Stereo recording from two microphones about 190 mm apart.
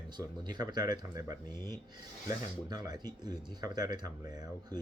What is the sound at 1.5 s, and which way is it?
Speech, 15° left (ahead or behind).